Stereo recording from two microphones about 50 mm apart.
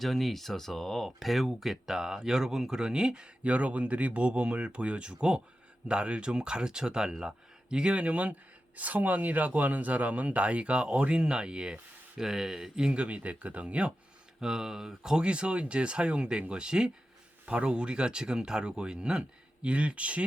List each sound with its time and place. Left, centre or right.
0.0 s speech: centre; by 13.9 s right
14.4 s speech: centre